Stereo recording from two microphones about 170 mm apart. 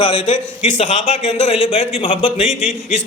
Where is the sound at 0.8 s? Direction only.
45° left (ahead or behind).